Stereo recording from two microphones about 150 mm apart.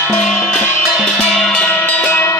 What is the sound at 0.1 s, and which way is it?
Music, 5° left (ahead or behind).